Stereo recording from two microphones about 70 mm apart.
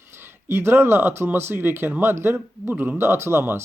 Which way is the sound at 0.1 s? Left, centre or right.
Right.